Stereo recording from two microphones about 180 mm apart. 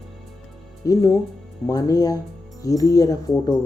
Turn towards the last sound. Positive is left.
turn(degrees=20)  # may be behind; listen again after turning